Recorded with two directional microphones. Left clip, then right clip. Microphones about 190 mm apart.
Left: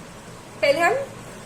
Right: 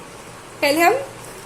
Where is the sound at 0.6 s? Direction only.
40° right (ahead or behind).